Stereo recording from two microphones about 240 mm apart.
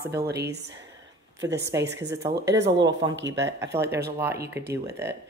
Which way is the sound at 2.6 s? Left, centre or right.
Right.